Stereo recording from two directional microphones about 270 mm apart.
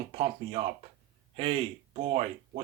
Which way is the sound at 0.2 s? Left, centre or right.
Right.